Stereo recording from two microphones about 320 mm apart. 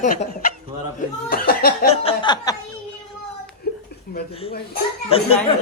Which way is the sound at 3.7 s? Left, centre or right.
Left.